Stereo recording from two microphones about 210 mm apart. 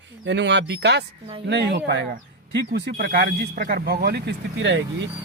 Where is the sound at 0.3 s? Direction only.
55° right (ahead or behind).